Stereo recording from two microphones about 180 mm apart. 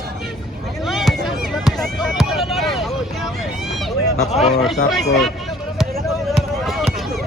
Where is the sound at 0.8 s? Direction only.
Centre (ahead or behind).